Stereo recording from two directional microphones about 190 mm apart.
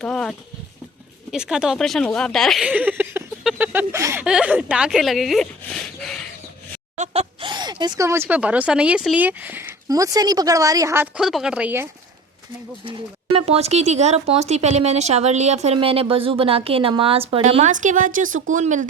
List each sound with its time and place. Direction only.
0.0 s speech: 5° left (ahead or behind)
6.9 s speech: 35° right (ahead or behind); by 11.9 s 10° right (ahead or behind)
13.3 s speech: 30° right (ahead or behind)